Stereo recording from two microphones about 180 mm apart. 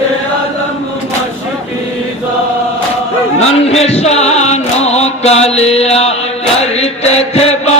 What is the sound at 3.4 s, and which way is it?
Music, 35° left (ahead or behind).